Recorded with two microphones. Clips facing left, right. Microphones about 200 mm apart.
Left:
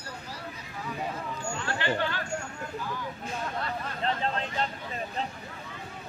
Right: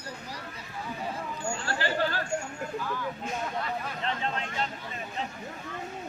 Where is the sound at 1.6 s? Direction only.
35° right (ahead or behind).